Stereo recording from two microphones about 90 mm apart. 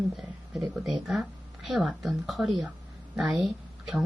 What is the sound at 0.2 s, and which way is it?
A woman's voice, 5° right (ahead or behind).